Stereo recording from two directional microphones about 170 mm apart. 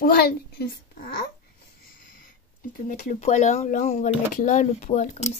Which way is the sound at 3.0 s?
45° left (ahead or behind).